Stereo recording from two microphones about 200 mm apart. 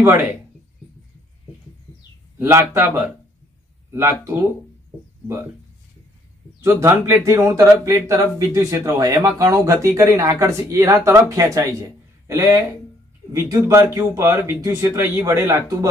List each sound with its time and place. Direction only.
2.3 s speech: 15° right (ahead or behind)
6.6 s speech: 15° right (ahead or behind)